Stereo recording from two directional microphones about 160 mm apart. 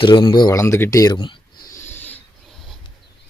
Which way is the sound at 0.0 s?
30° left (ahead or behind).